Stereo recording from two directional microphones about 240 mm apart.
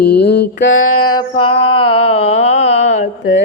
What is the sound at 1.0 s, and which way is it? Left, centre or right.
Mantra, centre.